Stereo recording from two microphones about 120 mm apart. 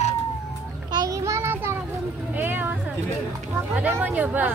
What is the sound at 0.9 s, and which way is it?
Child singing, 30° right (ahead or behind).